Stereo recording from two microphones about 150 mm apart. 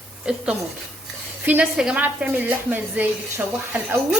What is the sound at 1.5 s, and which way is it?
A woman's voice, 10° right (ahead or behind).